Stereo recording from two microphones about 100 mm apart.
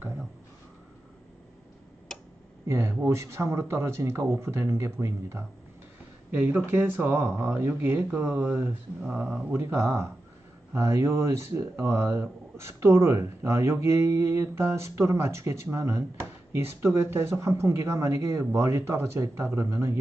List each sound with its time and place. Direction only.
2.1 s tick-tock: 5° left (ahead or behind)
2.6 s speech: 25° right (ahead or behind)
7.3 s speech: 10° right (ahead or behind); by 20.0 s 30° right (ahead or behind)